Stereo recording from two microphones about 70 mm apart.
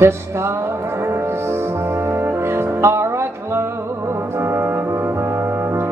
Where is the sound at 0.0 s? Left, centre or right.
Right.